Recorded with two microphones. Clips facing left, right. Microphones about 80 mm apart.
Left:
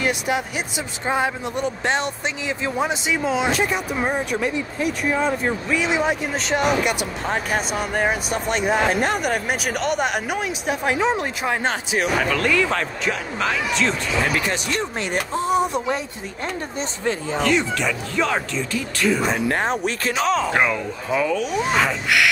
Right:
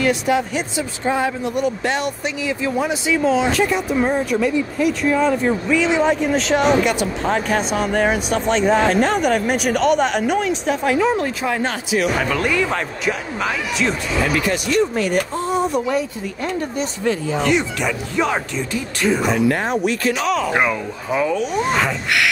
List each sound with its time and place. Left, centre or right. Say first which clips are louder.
0.0 s speech: right 5 dB; centre
4.4 s speech: right 5 dB; left; by 10.9 s centre
10.9 s speech: right 3 dB; left
12.2 s speech: right 1 dB; centre
14.5 s speech: right 6 dB; left
17.0 s speech: right 3 dB; left
17.5 s speech: even; centre
19.5 s speech: right 2 dB; left
21.1 s speech: right 2 dB; centre
21.7 s a sound: even; centre